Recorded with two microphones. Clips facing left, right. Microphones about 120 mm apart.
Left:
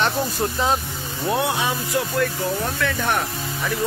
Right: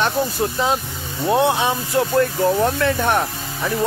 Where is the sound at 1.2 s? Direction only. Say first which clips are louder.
Right 5 dB; 25° right (ahead or behind).